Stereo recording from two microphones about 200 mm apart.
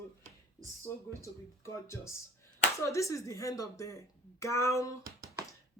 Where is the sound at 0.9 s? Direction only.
15° left (ahead or behind).